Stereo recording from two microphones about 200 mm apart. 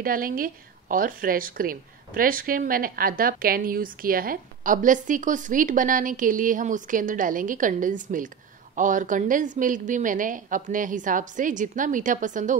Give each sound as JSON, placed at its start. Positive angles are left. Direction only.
{"t": 0.0, "sound": "a woman's voice", "side_deg": -45}